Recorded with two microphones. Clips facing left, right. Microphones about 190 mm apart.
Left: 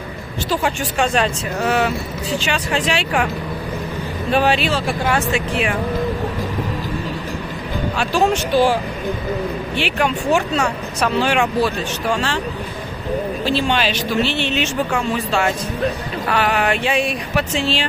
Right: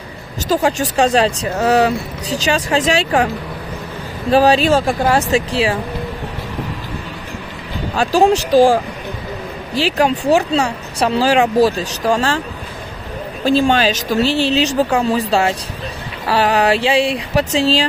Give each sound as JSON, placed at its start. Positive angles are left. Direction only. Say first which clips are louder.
{"t": 0.5, "sound": "speech", "louder": "right 5 dB", "side_deg": -40}
{"t": 4.3, "sound": "speech", "louder": "right 6 dB", "side_deg": -35}
{"t": 7.9, "sound": "speech", "louder": "right 5 dB", "side_deg": -40}
{"t": 9.8, "sound": "speech", "louder": "right 6 dB", "side_deg": -35}
{"t": 13.5, "sound": "speech", "louder": "right 7 dB", "side_deg": -45}